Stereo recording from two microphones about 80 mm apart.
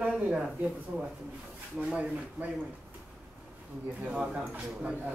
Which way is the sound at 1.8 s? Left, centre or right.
Centre.